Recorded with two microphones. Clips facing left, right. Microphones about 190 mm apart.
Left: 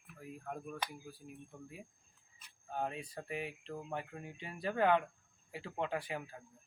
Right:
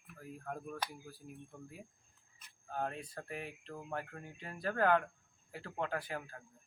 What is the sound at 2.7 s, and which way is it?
Speech, 5° left (ahead or behind).